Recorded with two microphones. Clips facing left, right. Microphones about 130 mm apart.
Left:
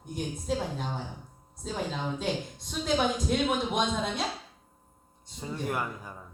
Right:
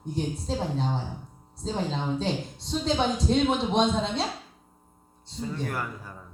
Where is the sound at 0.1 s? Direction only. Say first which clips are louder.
Right 2 dB; 30° right (ahead or behind).